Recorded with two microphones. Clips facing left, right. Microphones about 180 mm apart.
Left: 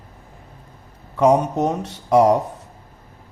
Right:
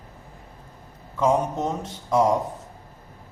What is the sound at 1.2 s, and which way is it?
Speech, 70° left (ahead or behind).